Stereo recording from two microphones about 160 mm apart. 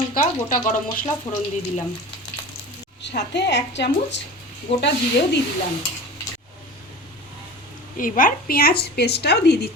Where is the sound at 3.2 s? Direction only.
90° left.